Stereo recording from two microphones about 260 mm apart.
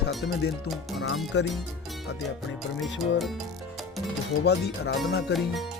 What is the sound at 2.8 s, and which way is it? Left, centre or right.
Speech, centre.